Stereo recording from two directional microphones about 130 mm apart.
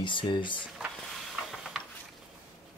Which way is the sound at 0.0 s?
40° left (ahead or behind).